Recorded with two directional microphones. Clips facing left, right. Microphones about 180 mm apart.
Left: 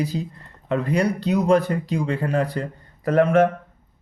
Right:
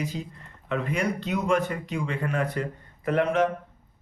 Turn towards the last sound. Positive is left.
turn(degrees=50)  # may be behind; listen again after turning